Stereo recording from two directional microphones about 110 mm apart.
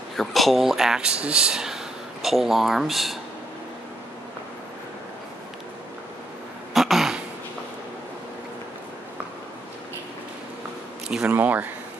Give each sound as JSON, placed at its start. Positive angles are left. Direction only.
{"t": 0.1, "sound": "speech", "side_deg": 0}
{"t": 6.7, "sound": "a sound", "side_deg": 0}
{"t": 11.1, "sound": "speech", "side_deg": -10}